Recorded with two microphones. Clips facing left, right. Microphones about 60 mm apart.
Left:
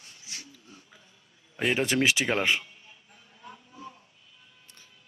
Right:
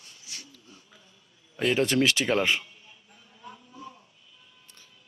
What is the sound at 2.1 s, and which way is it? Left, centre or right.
Speech, centre.